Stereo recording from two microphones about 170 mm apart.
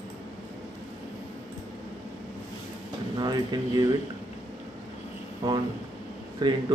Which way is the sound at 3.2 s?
25° right (ahead or behind).